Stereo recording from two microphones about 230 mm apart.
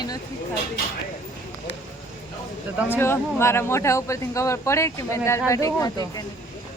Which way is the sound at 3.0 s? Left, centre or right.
Centre.